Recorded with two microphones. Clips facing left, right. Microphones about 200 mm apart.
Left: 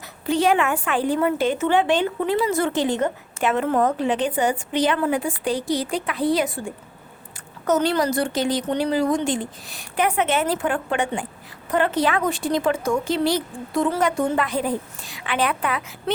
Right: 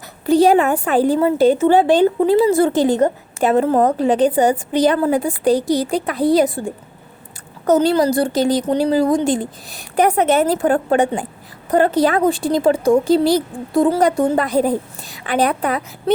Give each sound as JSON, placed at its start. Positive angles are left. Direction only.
{"t": 0.3, "sound": "a woman's voice", "side_deg": -35}